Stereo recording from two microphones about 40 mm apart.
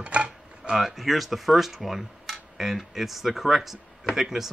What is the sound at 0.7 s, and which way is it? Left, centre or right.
Speech, centre.